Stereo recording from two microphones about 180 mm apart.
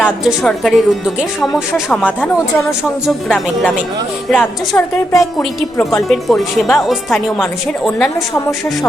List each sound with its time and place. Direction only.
0.3 s speech: centre (ahead or behind)
3.1 s speech: 5° left (ahead or behind)
4.4 s a woman's voice: 15° left (ahead or behind)
5.2 s speech: centre (ahead or behind)
8.4 s a woman's voice: 15° left (ahead or behind)